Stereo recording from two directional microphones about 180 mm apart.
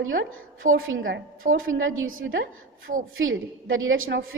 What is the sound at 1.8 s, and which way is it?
A woman's voice, 90° right.